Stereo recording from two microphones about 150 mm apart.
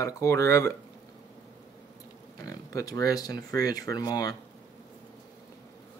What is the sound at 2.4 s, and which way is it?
Speech, 25° left (ahead or behind).